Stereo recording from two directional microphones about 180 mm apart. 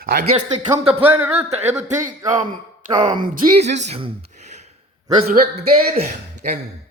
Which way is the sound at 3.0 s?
50° right (ahead or behind).